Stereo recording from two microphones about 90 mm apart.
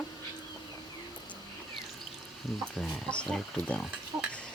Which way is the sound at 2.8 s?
10° left (ahead or behind).